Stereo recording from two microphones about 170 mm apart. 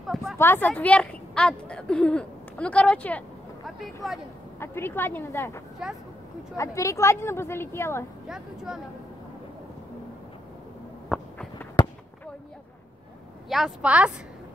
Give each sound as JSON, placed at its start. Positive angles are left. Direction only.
{"t": 0.0, "sound": "a sound", "side_deg": 0}
{"t": 0.4, "sound": "a woman's voice", "side_deg": 10}
{"t": 4.6, "sound": "speech", "side_deg": 15}
{"t": 8.3, "sound": "a woman's voice", "side_deg": 0}
{"t": 11.1, "sound": "a sound", "side_deg": 5}
{"t": 11.8, "sound": "fireworks", "side_deg": 25}
{"t": 13.5, "sound": "a woman's voice", "side_deg": 0}